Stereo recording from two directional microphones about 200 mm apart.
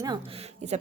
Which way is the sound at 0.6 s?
35° right (ahead or behind).